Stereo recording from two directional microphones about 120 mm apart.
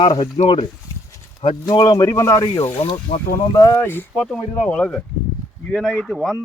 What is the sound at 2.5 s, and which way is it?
Speech, 55° left (ahead or behind).